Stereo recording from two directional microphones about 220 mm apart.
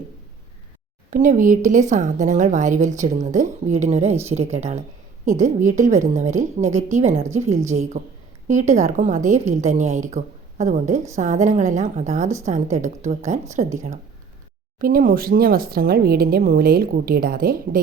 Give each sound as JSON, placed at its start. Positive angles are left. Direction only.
{"t": 1.1, "sound": "a woman's voice", "side_deg": -35}